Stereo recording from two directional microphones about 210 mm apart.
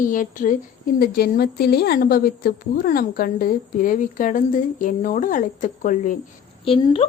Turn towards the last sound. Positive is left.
turn(degrees=25)  # may be behind; listen again after turning